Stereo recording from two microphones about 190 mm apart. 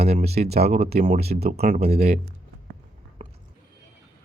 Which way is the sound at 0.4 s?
45° right (ahead or behind).